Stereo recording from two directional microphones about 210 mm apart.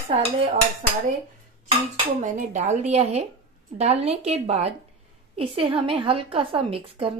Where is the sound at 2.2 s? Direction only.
35° right (ahead or behind).